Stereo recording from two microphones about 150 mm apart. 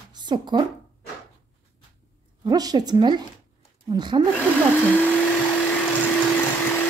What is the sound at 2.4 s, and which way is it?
A woman's voice, 25° right (ahead or behind).